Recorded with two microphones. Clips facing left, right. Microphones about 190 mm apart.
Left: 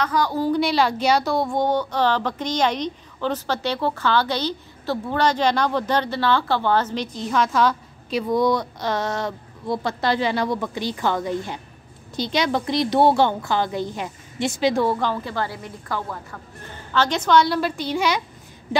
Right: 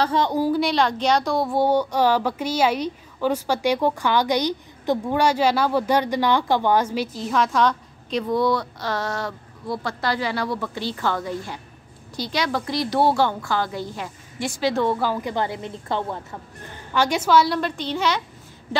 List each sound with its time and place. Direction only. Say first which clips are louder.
0.0 s a woman's voice: right 1 dB; 25° right (ahead or behind)
0.4 s a woman's voice: left 2 dB; centre (ahead or behind); by 14.9 s 15° left (ahead or behind)
14.9 s a woman's voice: even; 5° right (ahead or behind); by 16.3 s 25° right (ahead or behind)
16.9 s a woman's voice: even; 10° right (ahead or behind); by 18.2 s 10° left (ahead or behind)